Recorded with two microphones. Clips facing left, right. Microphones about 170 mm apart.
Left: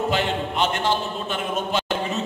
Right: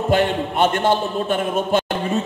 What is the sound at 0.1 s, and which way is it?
A man's voice, 50° right (ahead or behind).